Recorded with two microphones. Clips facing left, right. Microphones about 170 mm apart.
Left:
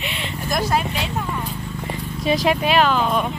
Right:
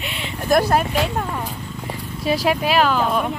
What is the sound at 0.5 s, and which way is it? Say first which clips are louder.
Speech: right 5 dB; 60° right (ahead or behind).